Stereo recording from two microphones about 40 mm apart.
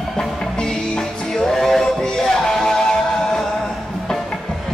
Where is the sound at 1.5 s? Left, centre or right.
Centre.